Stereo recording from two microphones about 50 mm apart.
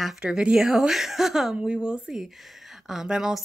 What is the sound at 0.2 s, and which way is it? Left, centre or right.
Speech, centre.